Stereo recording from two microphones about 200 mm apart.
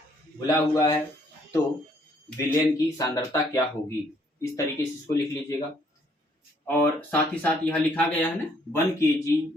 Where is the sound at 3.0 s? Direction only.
15° left (ahead or behind).